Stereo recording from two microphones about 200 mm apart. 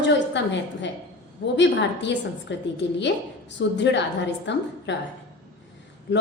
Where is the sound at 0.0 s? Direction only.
60° left (ahead or behind).